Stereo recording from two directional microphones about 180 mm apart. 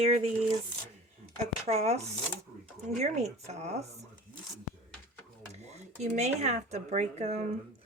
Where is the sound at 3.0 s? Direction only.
35° right (ahead or behind).